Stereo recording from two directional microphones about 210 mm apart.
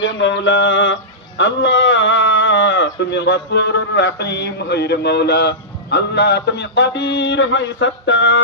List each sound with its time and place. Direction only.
0.0 s a man's voice: 60° left (ahead or behind)